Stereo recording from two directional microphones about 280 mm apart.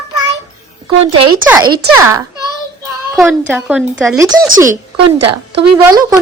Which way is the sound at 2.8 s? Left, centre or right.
Centre.